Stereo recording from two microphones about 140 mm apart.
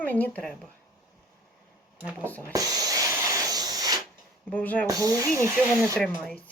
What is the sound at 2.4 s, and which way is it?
Spray, 25° right (ahead or behind).